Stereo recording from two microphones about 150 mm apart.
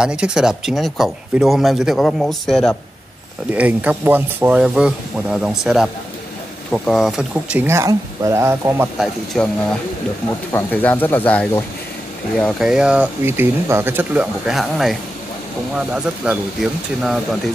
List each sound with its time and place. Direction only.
0.0 s speech: 5° right (ahead or behind)
3.5 s speech: 10° right (ahead or behind)
8.9 s speech: centre (ahead or behind)
10.5 s speech: 10° left (ahead or behind)
12.4 s speech: centre (ahead or behind)
14.5 s speech: centre (ahead or behind)